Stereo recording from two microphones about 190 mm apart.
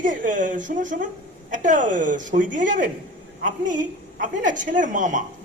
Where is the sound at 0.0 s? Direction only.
45° right (ahead or behind).